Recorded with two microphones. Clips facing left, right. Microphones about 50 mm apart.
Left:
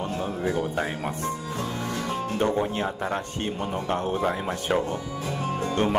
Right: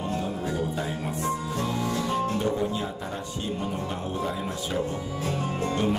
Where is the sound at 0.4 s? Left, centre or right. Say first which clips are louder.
Left 3 dB; left.